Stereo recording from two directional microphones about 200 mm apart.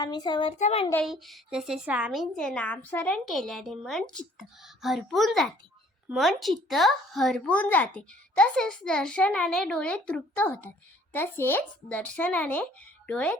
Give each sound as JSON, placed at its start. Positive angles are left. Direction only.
{"t": 0.0, "sound": "a child's voice", "side_deg": 20}
{"t": 1.0, "sound": "speech", "side_deg": 0}